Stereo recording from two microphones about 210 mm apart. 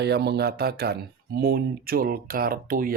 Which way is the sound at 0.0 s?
50° right (ahead or behind).